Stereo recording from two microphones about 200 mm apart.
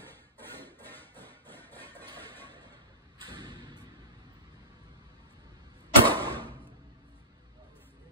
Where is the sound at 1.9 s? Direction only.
10° left (ahead or behind).